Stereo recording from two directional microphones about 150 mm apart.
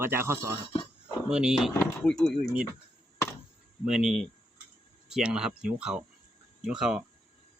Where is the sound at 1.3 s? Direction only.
5° right (ahead or behind).